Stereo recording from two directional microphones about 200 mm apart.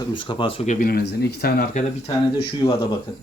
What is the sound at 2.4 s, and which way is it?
Speech, 25° left (ahead or behind).